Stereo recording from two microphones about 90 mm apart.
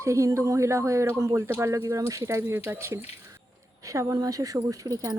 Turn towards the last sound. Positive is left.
turn(degrees=-40)  # may be behind; listen again after turning